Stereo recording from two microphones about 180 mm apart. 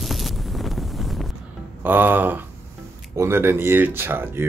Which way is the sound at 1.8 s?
10° right (ahead or behind).